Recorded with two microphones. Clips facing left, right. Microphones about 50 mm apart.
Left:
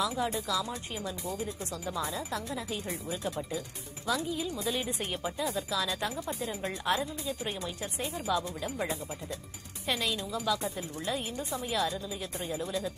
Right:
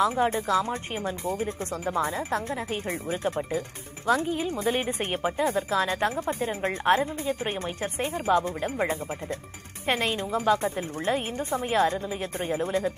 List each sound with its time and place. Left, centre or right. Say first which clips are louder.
0.0 s a woman's voice: right 7 dB; right